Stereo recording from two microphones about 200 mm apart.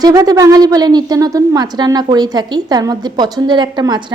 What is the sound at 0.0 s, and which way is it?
A woman's voice, 20° right (ahead or behind).